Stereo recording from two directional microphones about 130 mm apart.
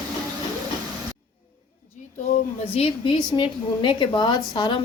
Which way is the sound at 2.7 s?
45° left (ahead or behind).